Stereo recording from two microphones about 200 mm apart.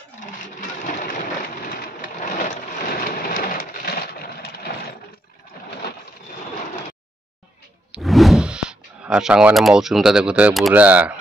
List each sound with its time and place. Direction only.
0.6 s sewing machine: 40° left (ahead or behind)
3.0 s a sound: 45° left (ahead or behind)
7.9 s speech: centre (ahead or behind)